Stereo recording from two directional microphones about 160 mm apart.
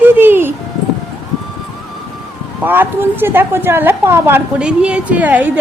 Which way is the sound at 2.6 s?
10° right (ahead or behind).